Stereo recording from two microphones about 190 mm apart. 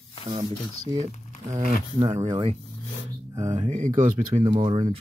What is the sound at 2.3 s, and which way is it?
Speech, 30° right (ahead or behind).